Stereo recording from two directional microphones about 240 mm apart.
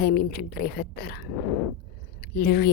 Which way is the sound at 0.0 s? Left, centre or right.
Left.